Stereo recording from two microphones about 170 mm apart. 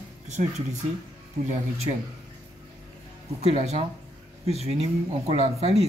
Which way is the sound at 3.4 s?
40° right (ahead or behind).